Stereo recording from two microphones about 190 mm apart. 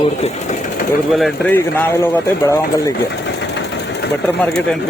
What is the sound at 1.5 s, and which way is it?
Speech, 10° left (ahead or behind).